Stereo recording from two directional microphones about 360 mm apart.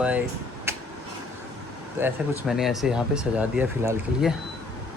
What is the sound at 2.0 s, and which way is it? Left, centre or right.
Speech, centre.